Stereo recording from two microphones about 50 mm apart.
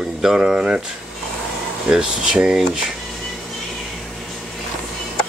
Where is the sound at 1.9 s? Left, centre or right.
Centre.